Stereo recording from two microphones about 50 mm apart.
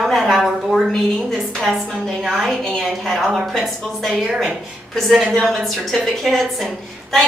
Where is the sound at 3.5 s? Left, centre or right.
Centre.